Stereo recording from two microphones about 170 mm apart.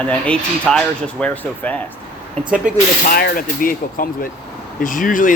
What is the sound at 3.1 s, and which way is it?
Speech, 60° left (ahead or behind).